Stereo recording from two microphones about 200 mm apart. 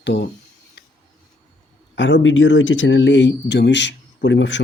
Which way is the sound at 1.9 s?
65° left (ahead or behind).